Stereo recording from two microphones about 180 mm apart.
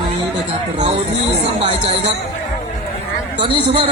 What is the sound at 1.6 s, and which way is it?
Music, 35° right (ahead or behind).